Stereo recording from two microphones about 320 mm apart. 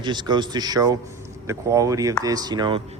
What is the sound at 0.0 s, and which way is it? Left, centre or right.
Speech, centre.